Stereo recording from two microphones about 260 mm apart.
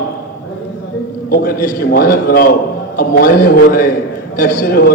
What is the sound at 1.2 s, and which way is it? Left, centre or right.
A man's voice, left.